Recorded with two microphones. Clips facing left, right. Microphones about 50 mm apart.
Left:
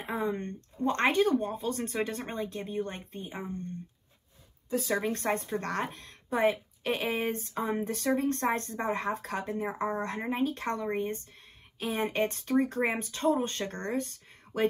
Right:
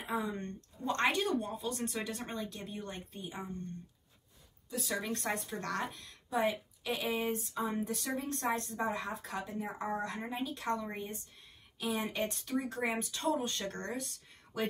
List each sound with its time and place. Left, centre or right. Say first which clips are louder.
0.0 s speech: left 4 dB; left
4.6 s speech: left 7 dB; left